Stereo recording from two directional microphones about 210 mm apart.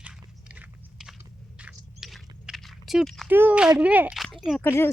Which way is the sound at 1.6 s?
Centre (ahead or behind).